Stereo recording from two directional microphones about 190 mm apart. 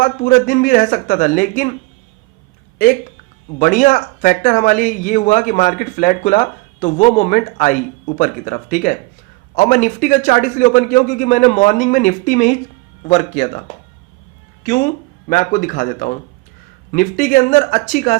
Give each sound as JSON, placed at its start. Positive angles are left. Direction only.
{"t": 0.0, "sound": "speech", "side_deg": 50}
{"t": 3.6, "sound": "speech", "side_deg": 45}
{"t": 14.6, "sound": "speech", "side_deg": 50}